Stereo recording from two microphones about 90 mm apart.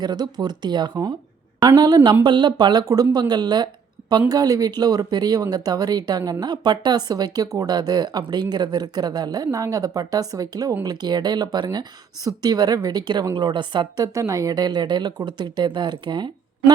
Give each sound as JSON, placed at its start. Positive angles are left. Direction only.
{"t": 0.0, "sound": "speech", "side_deg": -50}